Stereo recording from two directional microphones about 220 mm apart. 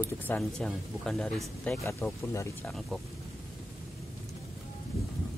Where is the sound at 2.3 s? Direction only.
10° left (ahead or behind).